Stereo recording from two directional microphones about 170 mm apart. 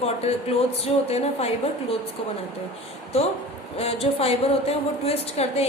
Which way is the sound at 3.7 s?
35° left (ahead or behind).